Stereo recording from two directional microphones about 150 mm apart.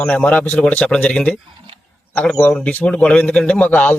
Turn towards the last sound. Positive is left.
turn(degrees=10)  # may be behind; listen again after turning